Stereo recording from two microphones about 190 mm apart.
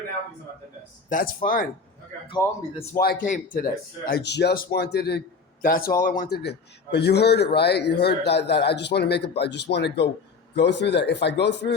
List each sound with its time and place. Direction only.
1.1 s speech: 45° left (ahead or behind)
2.4 s speech: 15° left (ahead or behind)
2.9 s speech: 50° left (ahead or behind)